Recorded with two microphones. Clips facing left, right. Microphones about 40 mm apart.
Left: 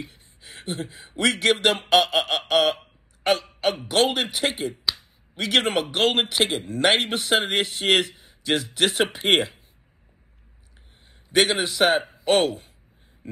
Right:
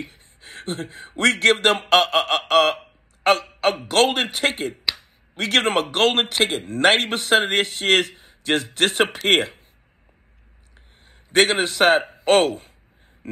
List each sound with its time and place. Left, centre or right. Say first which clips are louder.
0.0 s speech: right 3 dB; right
2.1 s a sound: right 3 dB; right
3.3 s speech: right 4 dB; right
11.3 s speech: right 3 dB; right